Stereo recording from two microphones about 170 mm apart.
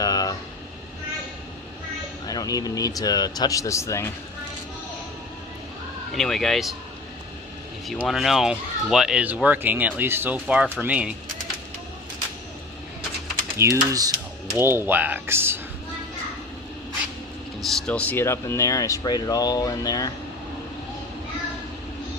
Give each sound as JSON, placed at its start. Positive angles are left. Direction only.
{"t": 0.0, "sound": "air conditioning", "side_deg": 20}
{"t": 2.2, "sound": "speech", "side_deg": 20}
{"t": 6.1, "sound": "speech", "side_deg": 0}
{"t": 7.9, "sound": "speech", "side_deg": 0}
{"t": 13.6, "sound": "speech", "side_deg": -20}
{"t": 17.6, "sound": "speech", "side_deg": 0}